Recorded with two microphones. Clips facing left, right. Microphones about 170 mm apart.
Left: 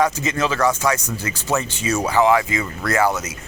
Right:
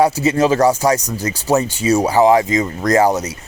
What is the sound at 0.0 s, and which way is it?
Speech, 35° right (ahead or behind).